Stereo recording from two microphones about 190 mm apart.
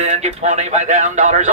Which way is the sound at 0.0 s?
35° right (ahead or behind).